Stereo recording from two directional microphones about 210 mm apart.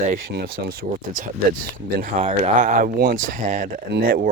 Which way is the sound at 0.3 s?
45° right (ahead or behind).